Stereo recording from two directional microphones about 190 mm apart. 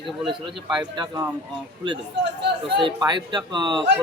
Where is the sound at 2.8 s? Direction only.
25° right (ahead or behind).